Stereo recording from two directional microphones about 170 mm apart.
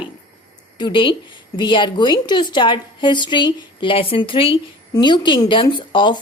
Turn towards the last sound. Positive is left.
turn(degrees=25)  # may be behind; listen again after turning